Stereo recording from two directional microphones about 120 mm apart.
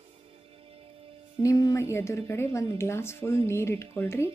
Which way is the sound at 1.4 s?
30° left (ahead or behind).